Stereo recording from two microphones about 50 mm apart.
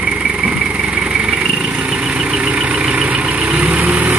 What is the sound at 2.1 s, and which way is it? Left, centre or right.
Vehicle, right.